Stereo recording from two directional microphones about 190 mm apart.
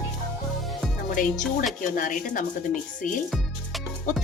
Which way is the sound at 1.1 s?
45° left (ahead or behind).